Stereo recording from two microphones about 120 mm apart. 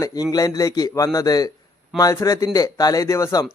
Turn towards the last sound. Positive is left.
turn(degrees=25)  # may be behind; listen again after turning